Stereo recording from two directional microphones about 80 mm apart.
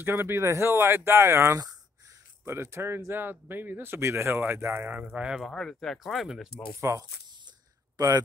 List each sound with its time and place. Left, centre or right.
0.0 s speech: right; by 5.4 s centre
5.4 s speech: centre
6.7 s speech: right
8.0 s speech: right